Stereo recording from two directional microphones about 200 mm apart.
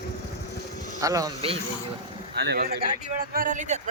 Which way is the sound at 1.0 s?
15° right (ahead or behind).